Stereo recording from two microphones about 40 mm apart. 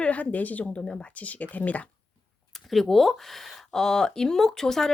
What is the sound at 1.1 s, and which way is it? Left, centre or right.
Speech, left.